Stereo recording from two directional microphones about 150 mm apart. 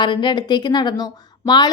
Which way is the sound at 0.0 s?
30° left (ahead or behind).